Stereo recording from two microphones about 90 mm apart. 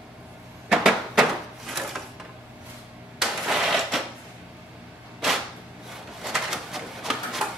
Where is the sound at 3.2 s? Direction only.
5° right (ahead or behind).